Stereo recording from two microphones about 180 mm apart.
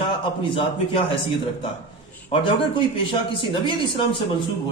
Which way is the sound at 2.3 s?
30° left (ahead or behind).